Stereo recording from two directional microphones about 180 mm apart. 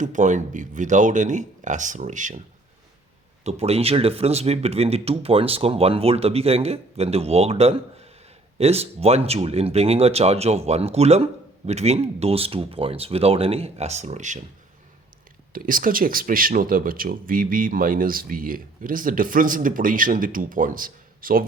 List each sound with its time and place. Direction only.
0.0 s speech: 45° right (ahead or behind)
3.4 s speech: 35° right (ahead or behind)
15.5 s speech: 50° right (ahead or behind)